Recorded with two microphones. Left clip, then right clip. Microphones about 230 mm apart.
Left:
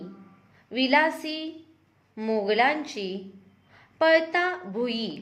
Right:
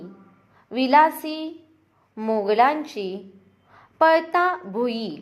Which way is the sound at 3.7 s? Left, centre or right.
Centre.